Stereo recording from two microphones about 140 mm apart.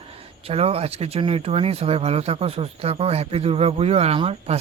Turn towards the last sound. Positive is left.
turn(degrees=-45)  # may be behind; listen again after turning